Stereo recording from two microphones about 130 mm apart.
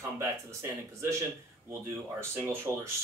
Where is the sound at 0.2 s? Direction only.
20° right (ahead or behind).